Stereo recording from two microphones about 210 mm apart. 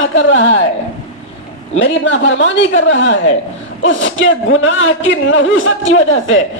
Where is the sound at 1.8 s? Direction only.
60° left (ahead or behind).